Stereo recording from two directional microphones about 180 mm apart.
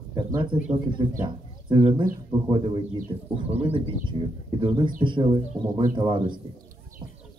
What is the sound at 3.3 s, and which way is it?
A woman's voice, 30° right (ahead or behind).